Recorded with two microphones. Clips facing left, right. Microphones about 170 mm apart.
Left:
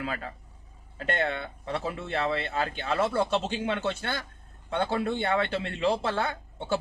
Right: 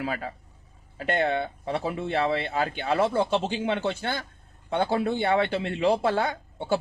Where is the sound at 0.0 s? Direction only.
30° right (ahead or behind).